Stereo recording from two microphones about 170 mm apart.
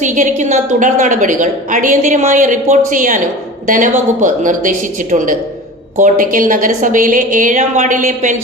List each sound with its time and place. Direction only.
0.0 s a woman's voice: 45° right (ahead or behind)